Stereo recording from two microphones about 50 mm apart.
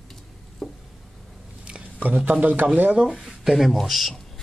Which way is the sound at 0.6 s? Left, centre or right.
Centre.